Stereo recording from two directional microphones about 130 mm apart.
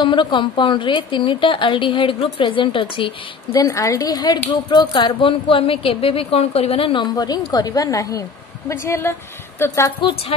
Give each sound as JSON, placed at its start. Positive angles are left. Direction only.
{"t": 0.0, "sound": "a woman's voice", "side_deg": 40}
{"t": 3.5, "sound": "a woman's voice", "side_deg": 25}
{"t": 7.2, "sound": "a woman's voice", "side_deg": 30}